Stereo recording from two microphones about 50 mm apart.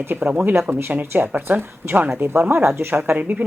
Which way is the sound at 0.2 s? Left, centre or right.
Right.